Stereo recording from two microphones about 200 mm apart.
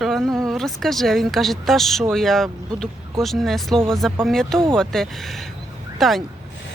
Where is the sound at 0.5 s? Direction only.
Centre (ahead or behind).